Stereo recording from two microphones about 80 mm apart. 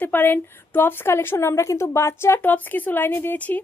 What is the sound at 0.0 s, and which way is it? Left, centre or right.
A woman's voice, left.